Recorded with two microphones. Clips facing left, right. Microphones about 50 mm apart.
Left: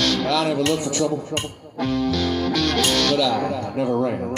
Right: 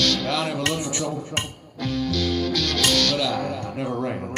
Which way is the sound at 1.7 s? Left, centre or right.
Left.